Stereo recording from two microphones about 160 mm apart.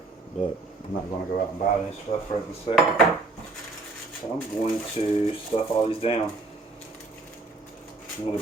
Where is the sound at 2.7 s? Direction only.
40° left (ahead or behind).